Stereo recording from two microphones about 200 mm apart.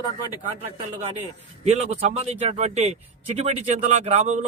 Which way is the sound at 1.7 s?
30° right (ahead or behind).